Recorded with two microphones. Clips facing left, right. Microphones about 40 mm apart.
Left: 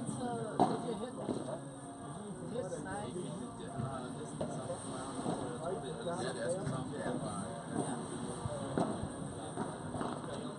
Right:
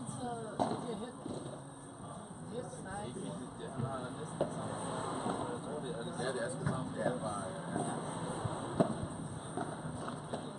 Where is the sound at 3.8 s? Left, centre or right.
Centre.